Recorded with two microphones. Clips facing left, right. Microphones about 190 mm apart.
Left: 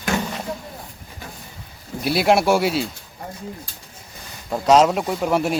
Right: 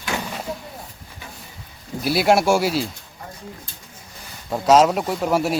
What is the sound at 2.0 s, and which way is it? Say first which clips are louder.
Speech: even; centre (ahead or behind).